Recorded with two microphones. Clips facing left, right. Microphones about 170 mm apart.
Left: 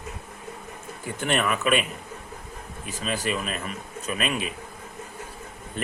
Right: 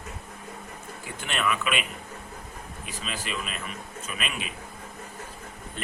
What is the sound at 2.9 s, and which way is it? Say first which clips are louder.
A man's voice: left 7 dB; 45° left (ahead or behind).